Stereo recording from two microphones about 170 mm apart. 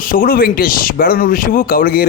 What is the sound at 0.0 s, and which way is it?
A man's voice, 55° left (ahead or behind).